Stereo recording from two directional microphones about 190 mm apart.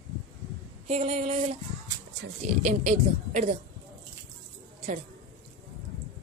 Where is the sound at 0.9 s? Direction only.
35° right (ahead or behind).